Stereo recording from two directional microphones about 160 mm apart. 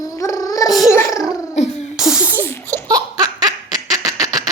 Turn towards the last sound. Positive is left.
turn(degrees=-20)  # may be behind; listen again after turning